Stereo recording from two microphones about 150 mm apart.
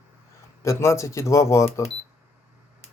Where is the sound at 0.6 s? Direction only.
20° left (ahead or behind).